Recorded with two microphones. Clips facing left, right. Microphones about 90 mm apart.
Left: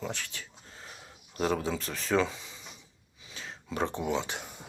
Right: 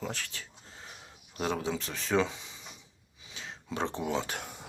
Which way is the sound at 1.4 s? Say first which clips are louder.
Left 3 dB; 35° left (ahead or behind).